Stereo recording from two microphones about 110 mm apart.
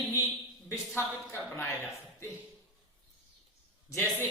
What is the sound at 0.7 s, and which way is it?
A woman's voice, 25° left (ahead or behind).